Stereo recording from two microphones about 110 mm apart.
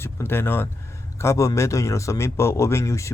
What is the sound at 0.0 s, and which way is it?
Speech, 20° left (ahead or behind).